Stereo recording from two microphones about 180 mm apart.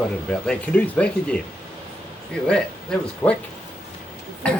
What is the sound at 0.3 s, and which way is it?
Speech, 5° left (ahead or behind).